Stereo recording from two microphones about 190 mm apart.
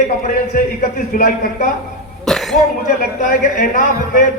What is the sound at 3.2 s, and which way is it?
A man's voice, 45° left (ahead or behind).